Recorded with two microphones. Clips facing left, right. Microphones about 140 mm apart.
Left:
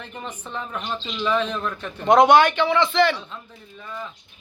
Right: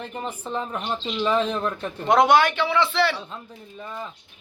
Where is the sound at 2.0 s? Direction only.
Centre (ahead or behind).